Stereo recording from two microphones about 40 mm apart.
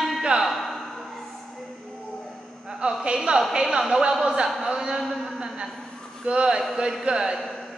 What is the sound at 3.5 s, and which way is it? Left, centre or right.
A man's voice, right.